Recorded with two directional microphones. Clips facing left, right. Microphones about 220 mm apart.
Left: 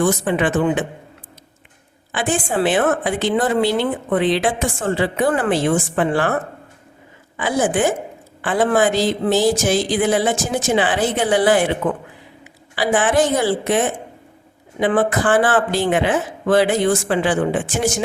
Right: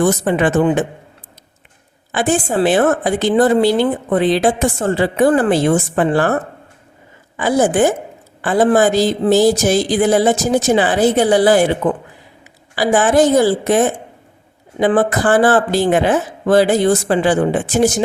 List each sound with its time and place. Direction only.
0.0 s a woman's voice: 40° right (ahead or behind)
2.1 s a woman's voice: 40° right (ahead or behind)
7.3 s a woman's voice: 40° right (ahead or behind)
12.7 s a woman's voice: 40° right (ahead or behind)